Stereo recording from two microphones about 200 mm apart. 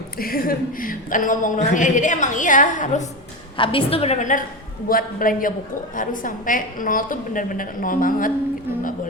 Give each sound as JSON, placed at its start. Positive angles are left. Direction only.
{"t": 0.2, "sound": "speech", "side_deg": 45}
{"t": 3.6, "sound": "a woman's voice", "side_deg": 25}